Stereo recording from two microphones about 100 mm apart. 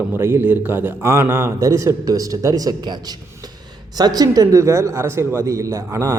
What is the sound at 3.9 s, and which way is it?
Speech, 40° right (ahead or behind).